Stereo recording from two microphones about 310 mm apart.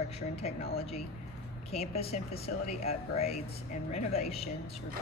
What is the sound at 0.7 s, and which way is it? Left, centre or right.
Speech, centre.